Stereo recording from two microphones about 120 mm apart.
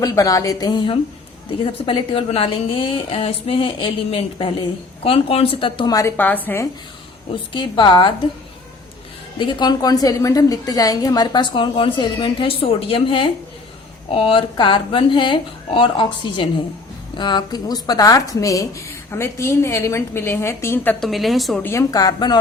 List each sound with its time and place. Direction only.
0.0 s a woman's voice: 30° left (ahead or behind); by 5.9 s 45° left (ahead or behind)
5.9 s a woman's voice: 25° left (ahead or behind)
6.1 s a woman's voice: 15° left (ahead or behind)
7.5 s a woman's voice: 40° left (ahead or behind)
9.4 s a woman's voice: 35° left (ahead or behind); by 20.9 s 20° left (ahead or behind)
21.0 s a woman's voice: centre (ahead or behind)
21.6 s a woman's voice: 25° left (ahead or behind)